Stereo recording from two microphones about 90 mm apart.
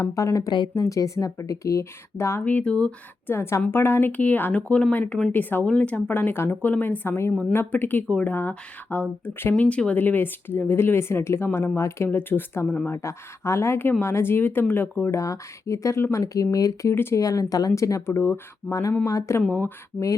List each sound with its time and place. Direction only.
0.0 s speech: 35° left (ahead or behind)
2.4 s speech: 15° left (ahead or behind)
3.2 s speech: 30° left (ahead or behind)
16.9 s speech: 25° left (ahead or behind)
17.2 s speech: 40° left (ahead or behind)